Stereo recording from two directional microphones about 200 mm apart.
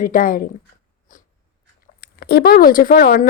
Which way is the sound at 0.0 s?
45° left (ahead or behind).